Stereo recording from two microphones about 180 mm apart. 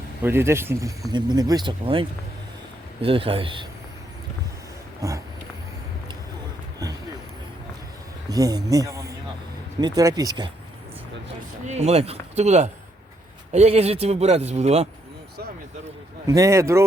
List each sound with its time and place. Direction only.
0.2 s speech: 10° right (ahead or behind); by 3.7 s 30° right (ahead or behind)
5.0 s speech: 20° right (ahead or behind)
8.3 s speech: 20° right (ahead or behind)
11.6 s speech: 40° right (ahead or behind)
16.2 s speech: 20° right (ahead or behind)